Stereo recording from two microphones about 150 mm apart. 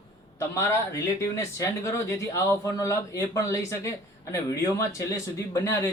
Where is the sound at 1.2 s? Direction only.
20° left (ahead or behind).